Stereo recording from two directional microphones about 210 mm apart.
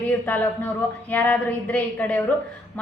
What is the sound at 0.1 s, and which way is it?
A woman's voice, 10° left (ahead or behind).